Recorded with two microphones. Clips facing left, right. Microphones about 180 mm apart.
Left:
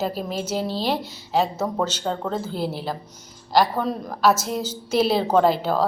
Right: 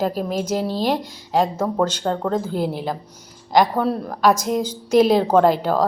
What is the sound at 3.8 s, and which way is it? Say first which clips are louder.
A woman's voice: right 2 dB; 10° right (ahead or behind).